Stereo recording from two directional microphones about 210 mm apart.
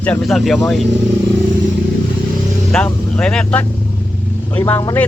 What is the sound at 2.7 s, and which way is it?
Speech, 5° left (ahead or behind).